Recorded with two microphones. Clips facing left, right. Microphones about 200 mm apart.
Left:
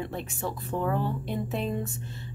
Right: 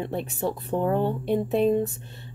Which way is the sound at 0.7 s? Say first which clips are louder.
Right 4 dB; 25° right (ahead or behind).